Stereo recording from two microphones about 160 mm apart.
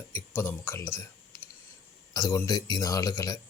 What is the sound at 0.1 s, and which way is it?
Speech, 15° left (ahead or behind).